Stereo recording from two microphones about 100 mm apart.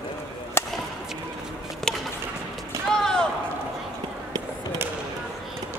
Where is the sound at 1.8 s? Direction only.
Centre (ahead or behind).